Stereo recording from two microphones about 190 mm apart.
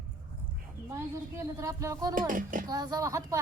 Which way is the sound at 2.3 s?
45° right (ahead or behind).